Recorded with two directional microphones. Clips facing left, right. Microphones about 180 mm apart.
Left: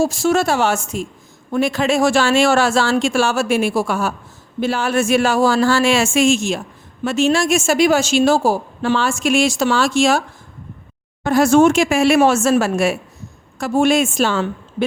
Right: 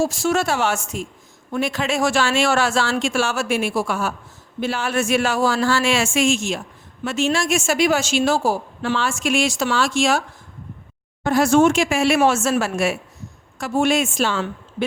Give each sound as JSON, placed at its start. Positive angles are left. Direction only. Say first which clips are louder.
{"t": 0.0, "sound": "speech", "louder": "left 4 dB", "side_deg": 30}
{"t": 11.3, "sound": "speech", "louder": "left 3 dB", "side_deg": 40}